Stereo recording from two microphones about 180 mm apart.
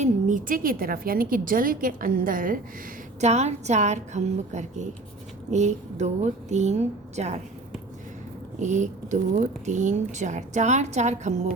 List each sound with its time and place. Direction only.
0.0 s a woman's voice: 45° right (ahead or behind)
3.2 s speech: 35° right (ahead or behind)
8.6 s speech: 40° right (ahead or behind)